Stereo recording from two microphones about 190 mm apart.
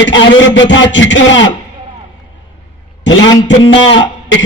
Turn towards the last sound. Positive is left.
turn(degrees=85)